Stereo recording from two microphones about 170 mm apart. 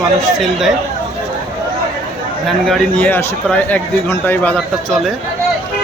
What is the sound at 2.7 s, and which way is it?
Speech, 10° left (ahead or behind).